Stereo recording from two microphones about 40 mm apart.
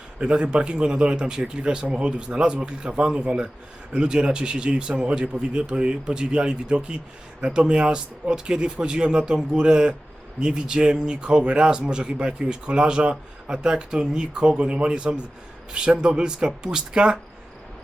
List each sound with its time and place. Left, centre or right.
0.2 s a man's voice: right